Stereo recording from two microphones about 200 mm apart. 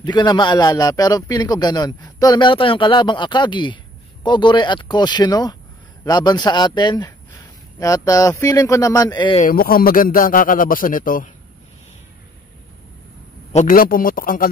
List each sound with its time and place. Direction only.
0.0 s speech: 20° left (ahead or behind)
9.4 s a man's voice: 45° left (ahead or behind)
13.5 s a man's voice: 40° left (ahead or behind)